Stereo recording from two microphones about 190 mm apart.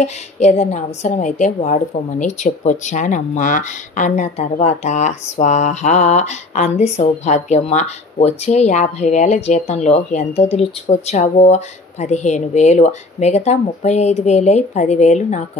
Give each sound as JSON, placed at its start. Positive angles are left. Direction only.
{"t": 0.0, "sound": "a woman's voice", "side_deg": 35}